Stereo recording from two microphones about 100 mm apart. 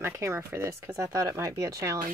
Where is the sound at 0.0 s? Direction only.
30° right (ahead or behind).